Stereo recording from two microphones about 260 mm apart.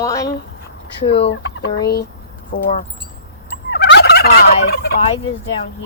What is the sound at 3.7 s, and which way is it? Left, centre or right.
Fowl, left.